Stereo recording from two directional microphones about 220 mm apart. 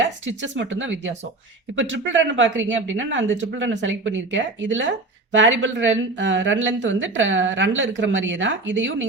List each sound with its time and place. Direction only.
0.0 s speech: 60° right (ahead or behind)